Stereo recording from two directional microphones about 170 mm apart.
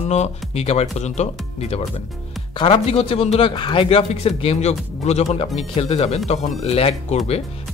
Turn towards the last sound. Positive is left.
turn(degrees=35)  # may be behind; listen again after turning